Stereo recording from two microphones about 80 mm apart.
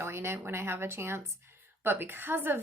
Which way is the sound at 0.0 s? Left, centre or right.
Right.